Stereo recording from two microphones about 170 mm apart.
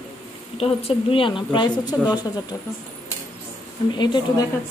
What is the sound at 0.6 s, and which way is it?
A woman's voice, 35° left (ahead or behind).